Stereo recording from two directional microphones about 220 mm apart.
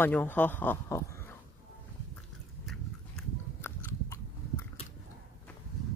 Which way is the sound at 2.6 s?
5° left (ahead or behind).